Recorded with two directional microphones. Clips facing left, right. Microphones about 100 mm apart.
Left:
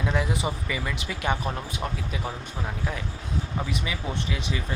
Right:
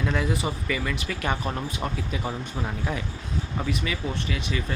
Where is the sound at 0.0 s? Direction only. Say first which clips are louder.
Right 1 dB; 15° left (ahead or behind); by 3.0 s centre (ahead or behind).